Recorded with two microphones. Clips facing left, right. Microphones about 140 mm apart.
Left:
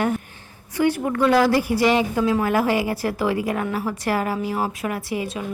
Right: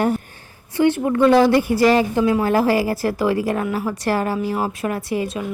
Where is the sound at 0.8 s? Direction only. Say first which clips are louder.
Right 4 dB; 25° right (ahead or behind).